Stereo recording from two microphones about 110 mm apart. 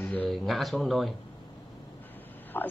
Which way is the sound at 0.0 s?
15° left (ahead or behind).